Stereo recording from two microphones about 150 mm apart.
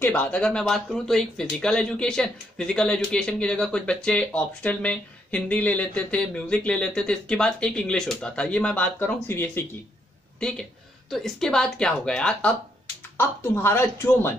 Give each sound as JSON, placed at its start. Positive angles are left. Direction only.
{"t": 0.0, "sound": "speech", "side_deg": 10}
{"t": 11.1, "sound": "speech", "side_deg": 0}